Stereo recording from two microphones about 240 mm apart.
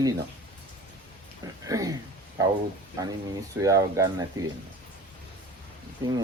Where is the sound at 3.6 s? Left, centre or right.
Centre.